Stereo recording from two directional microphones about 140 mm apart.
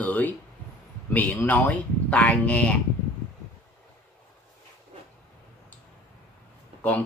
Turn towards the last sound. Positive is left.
turn(degrees=10)  # may be behind; listen again after turning